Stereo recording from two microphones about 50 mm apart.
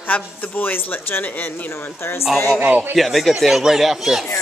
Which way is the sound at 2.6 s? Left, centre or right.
Right.